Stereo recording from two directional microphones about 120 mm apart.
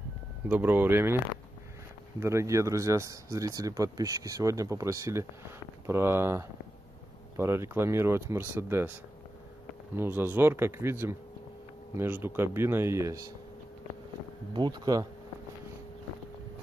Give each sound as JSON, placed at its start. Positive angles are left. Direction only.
{"t": 0.5, "sound": "speech", "side_deg": -15}
{"t": 9.9, "sound": "speech", "side_deg": -15}
{"t": 14.5, "sound": "speech", "side_deg": -35}